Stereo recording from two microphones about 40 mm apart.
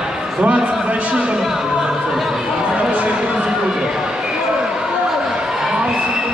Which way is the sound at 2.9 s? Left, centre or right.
Right.